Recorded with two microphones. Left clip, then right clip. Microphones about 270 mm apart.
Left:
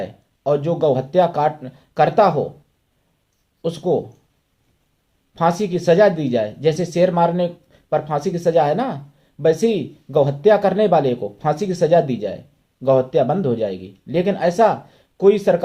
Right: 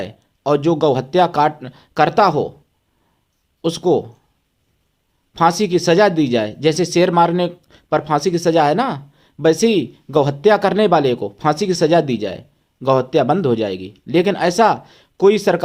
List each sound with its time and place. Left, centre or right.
0.0 s speech: right
3.6 s speech: right
5.3 s speech: right